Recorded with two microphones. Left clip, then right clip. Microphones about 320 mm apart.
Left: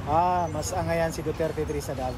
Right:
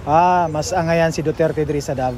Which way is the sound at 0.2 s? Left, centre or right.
Right.